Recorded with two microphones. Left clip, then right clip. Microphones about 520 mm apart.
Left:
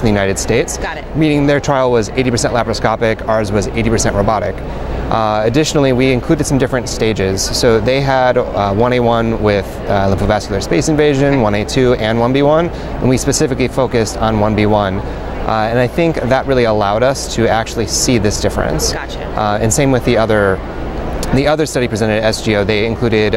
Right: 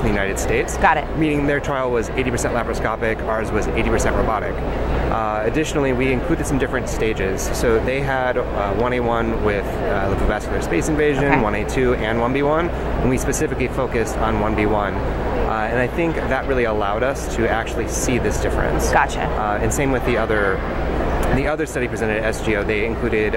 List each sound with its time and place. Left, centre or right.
0.1 s speech: left